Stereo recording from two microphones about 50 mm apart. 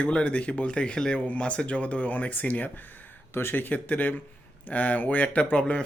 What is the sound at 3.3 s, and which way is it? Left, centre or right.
Speech, left.